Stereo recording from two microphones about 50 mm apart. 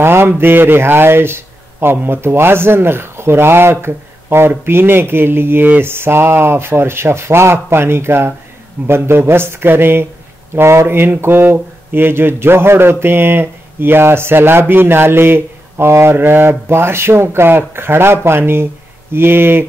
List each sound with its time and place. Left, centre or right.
0.0 s a man's voice: right
10.5 s speech: right
11.0 s a man's voice: right